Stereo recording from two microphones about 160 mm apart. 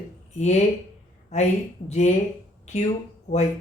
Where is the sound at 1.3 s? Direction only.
45° left (ahead or behind).